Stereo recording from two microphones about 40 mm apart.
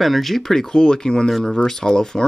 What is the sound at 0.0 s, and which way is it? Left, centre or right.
Speech, centre.